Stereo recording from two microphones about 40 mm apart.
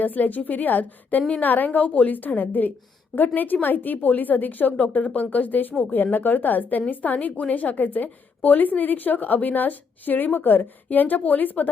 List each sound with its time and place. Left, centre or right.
0.0 s a woman's voice: left